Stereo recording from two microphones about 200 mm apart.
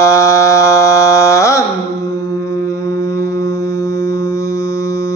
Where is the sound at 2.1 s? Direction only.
15° left (ahead or behind).